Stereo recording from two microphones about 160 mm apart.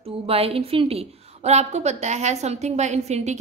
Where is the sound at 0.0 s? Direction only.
40° right (ahead or behind).